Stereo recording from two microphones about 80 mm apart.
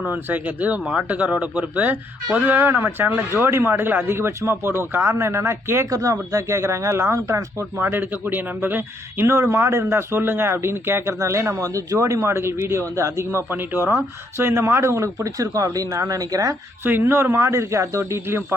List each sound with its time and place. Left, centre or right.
0.1 s speech: right
13.5 s speech: right
16.8 s speech: right